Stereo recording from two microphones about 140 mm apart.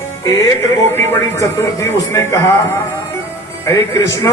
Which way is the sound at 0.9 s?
20° left (ahead or behind).